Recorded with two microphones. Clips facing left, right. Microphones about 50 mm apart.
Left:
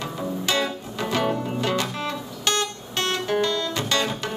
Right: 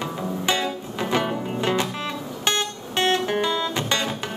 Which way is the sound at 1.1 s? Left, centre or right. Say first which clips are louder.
Even; centre.